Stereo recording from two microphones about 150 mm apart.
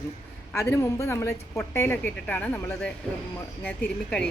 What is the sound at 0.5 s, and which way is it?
A woman's voice, 15° left (ahead or behind).